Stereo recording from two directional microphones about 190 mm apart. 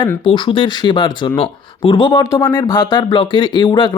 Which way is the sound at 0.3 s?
25° left (ahead or behind).